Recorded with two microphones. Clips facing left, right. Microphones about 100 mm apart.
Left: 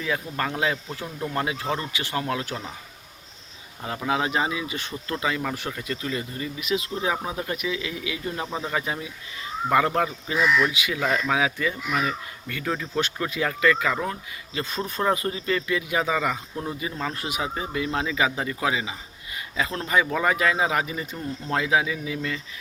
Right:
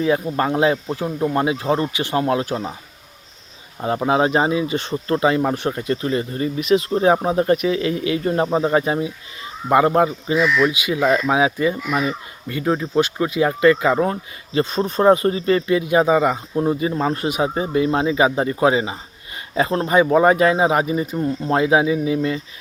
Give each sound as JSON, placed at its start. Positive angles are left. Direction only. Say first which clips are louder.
{"t": 0.3, "sound": "speech", "louder": "right 8 dB", "side_deg": -30}
{"t": 3.8, "sound": "speech", "louder": "right 8 dB", "side_deg": -35}
{"t": 14.6, "sound": "speech", "louder": "right 10 dB", "side_deg": -20}